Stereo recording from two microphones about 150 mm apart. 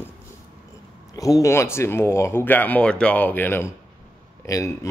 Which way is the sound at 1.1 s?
25° left (ahead or behind).